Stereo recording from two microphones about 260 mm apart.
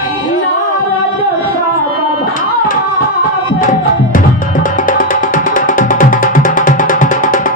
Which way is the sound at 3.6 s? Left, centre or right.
Left.